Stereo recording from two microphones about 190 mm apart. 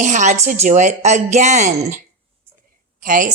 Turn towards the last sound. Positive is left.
turn(degrees=-45)  # may be behind; listen again after turning